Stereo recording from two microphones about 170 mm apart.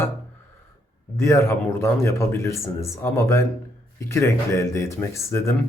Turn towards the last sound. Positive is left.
turn(degrees=15)  # may be behind; listen again after turning